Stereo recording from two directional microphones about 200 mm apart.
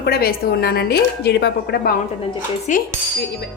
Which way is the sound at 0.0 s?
50° left (ahead or behind).